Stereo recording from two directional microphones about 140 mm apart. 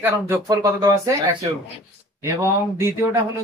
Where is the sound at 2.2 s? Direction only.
20° right (ahead or behind).